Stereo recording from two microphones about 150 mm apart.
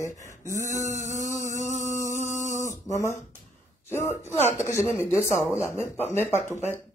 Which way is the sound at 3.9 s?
15° left (ahead or behind).